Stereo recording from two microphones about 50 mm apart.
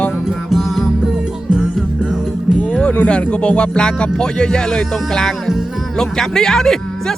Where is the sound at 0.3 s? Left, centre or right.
Centre.